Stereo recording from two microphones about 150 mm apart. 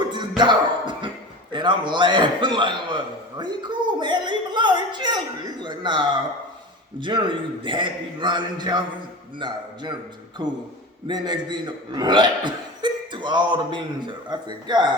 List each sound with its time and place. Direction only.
0.1 s cough: 30° right (ahead or behind)
1.5 s speech: 30° right (ahead or behind)
10.4 s speech: 30° right (ahead or behind)